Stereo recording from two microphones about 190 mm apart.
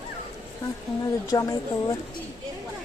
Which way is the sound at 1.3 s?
20° left (ahead or behind).